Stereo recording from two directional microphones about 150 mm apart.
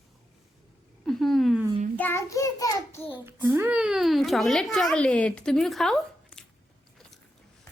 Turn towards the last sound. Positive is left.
turn(degrees=5)  # may be behind; listen again after turning